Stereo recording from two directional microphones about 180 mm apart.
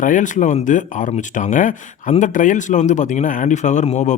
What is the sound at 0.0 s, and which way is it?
Speech, 45° left (ahead or behind).